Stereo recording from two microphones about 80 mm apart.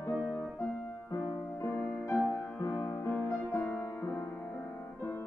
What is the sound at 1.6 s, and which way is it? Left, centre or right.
Music, left.